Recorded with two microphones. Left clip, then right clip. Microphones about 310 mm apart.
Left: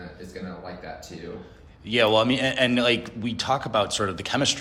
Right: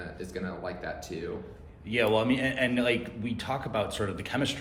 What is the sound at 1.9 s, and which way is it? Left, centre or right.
A man's voice, centre.